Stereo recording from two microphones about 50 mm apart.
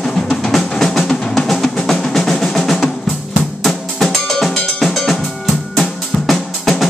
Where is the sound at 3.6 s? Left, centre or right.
Centre.